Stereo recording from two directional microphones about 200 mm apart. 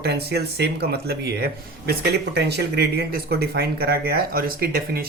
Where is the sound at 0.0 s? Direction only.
55° right (ahead or behind).